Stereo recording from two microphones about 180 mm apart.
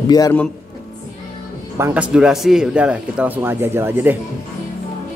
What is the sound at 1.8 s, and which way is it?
Speech, 10° right (ahead or behind).